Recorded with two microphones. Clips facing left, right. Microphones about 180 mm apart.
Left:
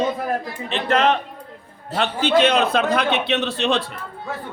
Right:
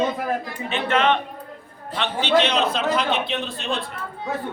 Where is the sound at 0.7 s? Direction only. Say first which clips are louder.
Left 2 dB; 40° left (ahead or behind); by 3.8 s 90° left.